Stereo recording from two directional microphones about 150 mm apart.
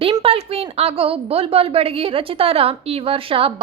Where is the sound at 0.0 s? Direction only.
35° right (ahead or behind).